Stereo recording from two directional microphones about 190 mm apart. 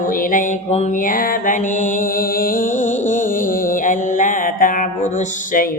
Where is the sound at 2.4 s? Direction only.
45° left (ahead or behind).